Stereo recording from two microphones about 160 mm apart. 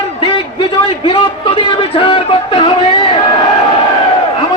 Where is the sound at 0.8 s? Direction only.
35° left (ahead or behind).